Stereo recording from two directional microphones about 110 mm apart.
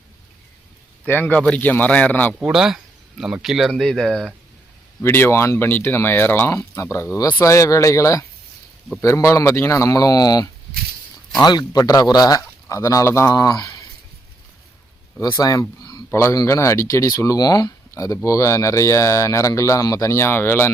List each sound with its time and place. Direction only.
1.0 s a man's voice: 15° left (ahead or behind)
2.5 s speech: 5° right (ahead or behind)
5.0 s speech: 20° left (ahead or behind)
13.3 s speech: 40° left (ahead or behind)
15.2 s speech: 35° left (ahead or behind)
15.8 s a sound: 40° left (ahead or behind)
16.0 s a man's voice: 25° left (ahead or behind)